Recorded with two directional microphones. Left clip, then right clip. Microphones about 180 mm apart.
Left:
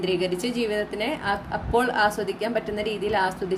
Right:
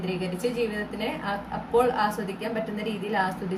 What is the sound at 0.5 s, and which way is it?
A woman's voice, 55° left (ahead or behind).